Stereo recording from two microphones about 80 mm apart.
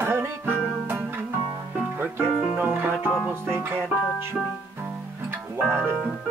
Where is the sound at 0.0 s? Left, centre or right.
Right.